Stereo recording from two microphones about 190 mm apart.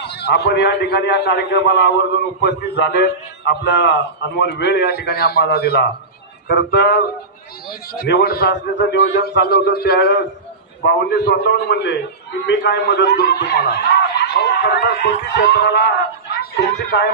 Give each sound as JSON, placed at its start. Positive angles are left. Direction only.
{"t": 0.0, "sound": "a man's voice", "side_deg": 60}